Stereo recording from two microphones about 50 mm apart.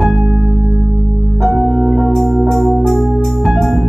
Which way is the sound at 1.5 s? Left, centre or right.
Right.